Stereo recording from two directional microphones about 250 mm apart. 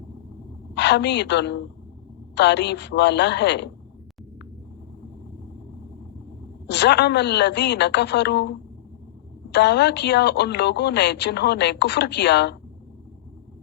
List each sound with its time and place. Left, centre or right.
0.7 s a woman's voice: left
6.7 s a woman's voice: left